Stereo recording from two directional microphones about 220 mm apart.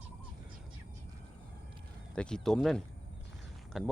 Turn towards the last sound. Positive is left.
turn(degrees=0)  # may be behind; listen again after turning